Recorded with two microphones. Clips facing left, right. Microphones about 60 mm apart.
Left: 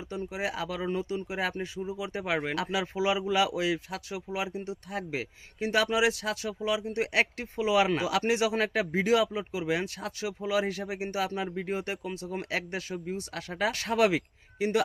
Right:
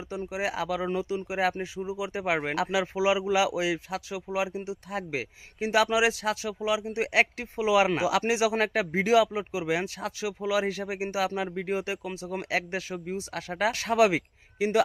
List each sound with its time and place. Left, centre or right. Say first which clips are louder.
0.1 s speech: right 2 dB; centre